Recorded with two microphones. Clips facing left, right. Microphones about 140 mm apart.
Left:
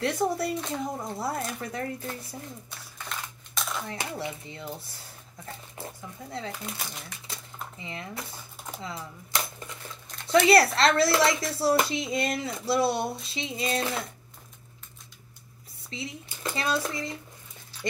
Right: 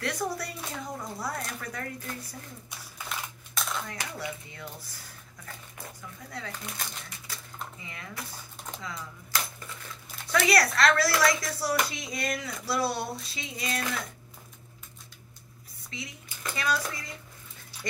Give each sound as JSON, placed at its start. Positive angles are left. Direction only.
{"t": 0.0, "sound": "speech", "side_deg": 25}
{"t": 3.1, "sound": "a sound", "side_deg": 0}
{"t": 3.8, "sound": "speech", "side_deg": 25}
{"t": 7.3, "sound": "typing", "side_deg": 25}
{"t": 7.8, "sound": "speech", "side_deg": 25}
{"t": 15.9, "sound": "speech", "side_deg": 30}